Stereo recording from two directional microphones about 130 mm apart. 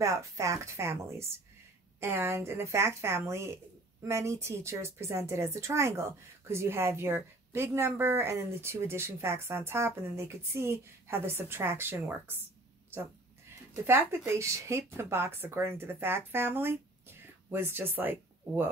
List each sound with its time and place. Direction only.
0.0 s a woman's voice: 25° right (ahead or behind)
13.8 s speech: 20° right (ahead or behind)